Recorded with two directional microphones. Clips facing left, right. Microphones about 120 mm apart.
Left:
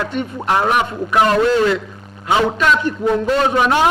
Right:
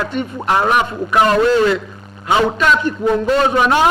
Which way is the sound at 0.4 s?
15° right (ahead or behind).